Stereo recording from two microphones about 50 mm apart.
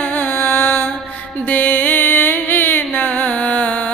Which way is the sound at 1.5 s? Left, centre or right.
Left.